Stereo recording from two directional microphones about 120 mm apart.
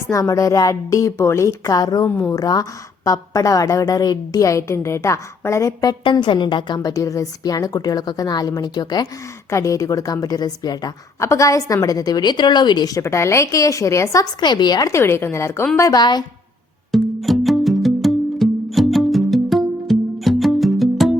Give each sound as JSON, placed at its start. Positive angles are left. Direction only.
{"t": 0.1, "sound": "a woman's voice", "side_deg": 25}
{"t": 2.0, "sound": "a woman's voice", "side_deg": 15}
{"t": 2.3, "sound": "a woman's voice", "side_deg": 30}
{"t": 15.8, "sound": "a woman's voice", "side_deg": 35}
{"t": 16.9, "sound": "music", "side_deg": 0}